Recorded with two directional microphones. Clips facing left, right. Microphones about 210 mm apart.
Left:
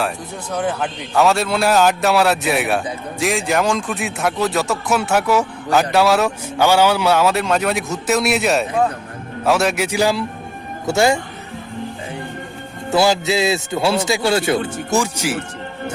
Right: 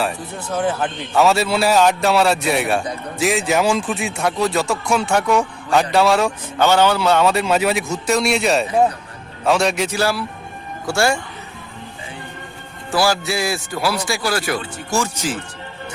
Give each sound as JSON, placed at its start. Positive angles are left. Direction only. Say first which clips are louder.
{"t": 0.5, "sound": "a man's voice", "louder": "right 1 dB", "side_deg": -5}
{"t": 12.9, "sound": "a man's voice", "louder": "left 3 dB", "side_deg": 20}